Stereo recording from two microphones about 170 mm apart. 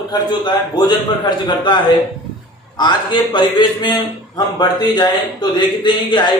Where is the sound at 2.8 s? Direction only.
25° left (ahead or behind).